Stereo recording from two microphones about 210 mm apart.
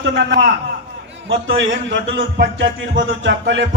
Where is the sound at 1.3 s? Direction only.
65° right (ahead or behind).